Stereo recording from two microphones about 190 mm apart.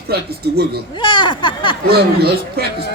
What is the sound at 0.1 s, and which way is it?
Speech, 55° right (ahead or behind).